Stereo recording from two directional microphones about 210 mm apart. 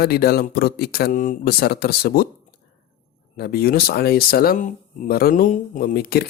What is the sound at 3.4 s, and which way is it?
Speech, 45° left (ahead or behind).